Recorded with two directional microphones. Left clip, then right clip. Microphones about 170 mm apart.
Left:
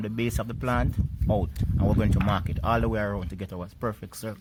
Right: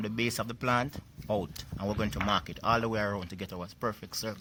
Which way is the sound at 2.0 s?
25° left (ahead or behind).